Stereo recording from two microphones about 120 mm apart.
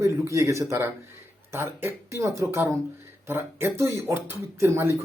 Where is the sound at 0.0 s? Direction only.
25° right (ahead or behind).